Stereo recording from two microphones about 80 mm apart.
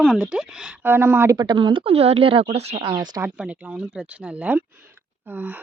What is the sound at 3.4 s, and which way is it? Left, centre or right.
Speech, centre.